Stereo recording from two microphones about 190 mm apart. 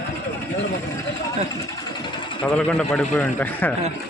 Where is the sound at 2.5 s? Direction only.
5° left (ahead or behind).